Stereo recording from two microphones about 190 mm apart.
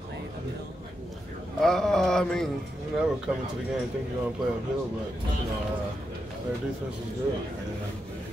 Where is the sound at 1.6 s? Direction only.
Centre (ahead or behind).